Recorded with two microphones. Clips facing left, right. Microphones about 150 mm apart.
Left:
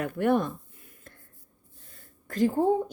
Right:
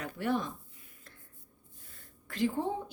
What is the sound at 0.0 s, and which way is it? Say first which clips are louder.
Speech: left 8 dB; 55° left (ahead or behind).